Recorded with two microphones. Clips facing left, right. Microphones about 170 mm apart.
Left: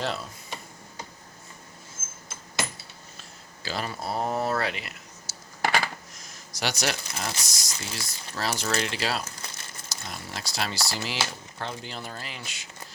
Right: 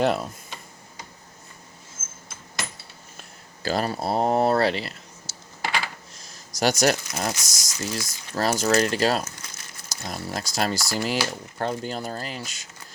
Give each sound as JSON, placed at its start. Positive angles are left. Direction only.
{"t": 0.0, "sound": "speech", "side_deg": -55}
{"t": 3.6, "sound": "speech", "side_deg": -45}
{"t": 4.0, "sound": "speech", "side_deg": -30}
{"t": 6.1, "sound": "speech", "side_deg": -45}